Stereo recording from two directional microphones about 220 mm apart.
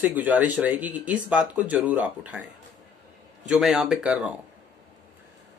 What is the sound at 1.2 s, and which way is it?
Speech, 5° right (ahead or behind).